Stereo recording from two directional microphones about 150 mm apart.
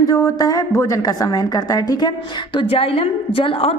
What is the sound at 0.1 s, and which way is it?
A woman's voice, 25° left (ahead or behind).